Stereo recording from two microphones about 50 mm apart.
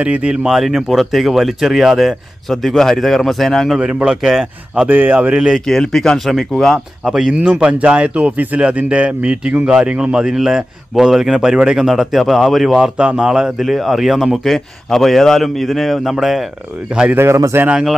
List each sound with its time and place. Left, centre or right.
0.0 s speech: right
0.5 s speech: centre
4.0 s a man's voice: centre
4.8 s a man's voice: right
5.3 s a man's voice: centre
5.7 s speech: centre
7.1 s a man's voice: centre
7.6 s a man's voice: right; by 16.4 s centre
17.1 s a man's voice: right